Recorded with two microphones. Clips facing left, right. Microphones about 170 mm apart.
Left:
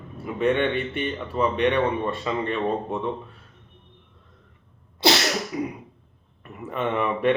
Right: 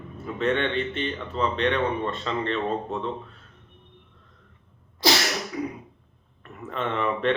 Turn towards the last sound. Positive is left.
turn(degrees=10)  # may be behind; listen again after turning